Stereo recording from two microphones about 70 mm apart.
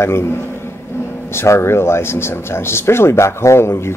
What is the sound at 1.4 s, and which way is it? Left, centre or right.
Speech, left.